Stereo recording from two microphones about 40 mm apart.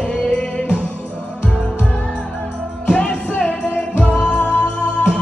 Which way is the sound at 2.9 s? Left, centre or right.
Left.